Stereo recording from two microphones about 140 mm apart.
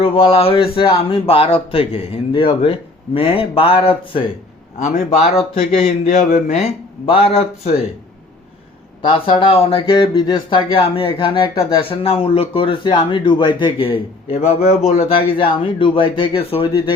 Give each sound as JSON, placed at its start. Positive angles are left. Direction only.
{"t": 0.0, "sound": "speech", "side_deg": 40}
{"t": 4.8, "sound": "a man's voice", "side_deg": 55}
{"t": 9.0, "sound": "speech", "side_deg": 40}